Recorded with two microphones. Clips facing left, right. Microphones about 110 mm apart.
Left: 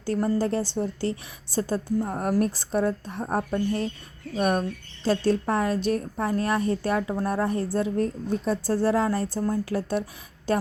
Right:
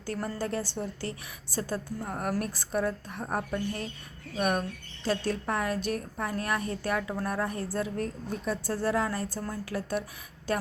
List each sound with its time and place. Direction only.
0.0 s a woman's voice: 30° left (ahead or behind)